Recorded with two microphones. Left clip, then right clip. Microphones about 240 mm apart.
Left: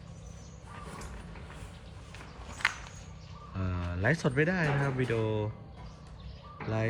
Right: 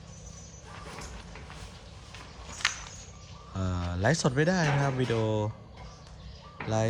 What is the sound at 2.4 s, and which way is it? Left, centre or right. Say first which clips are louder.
Walk: right 1 dB; centre.